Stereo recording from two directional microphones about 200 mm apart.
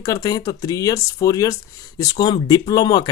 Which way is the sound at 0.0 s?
15° left (ahead or behind).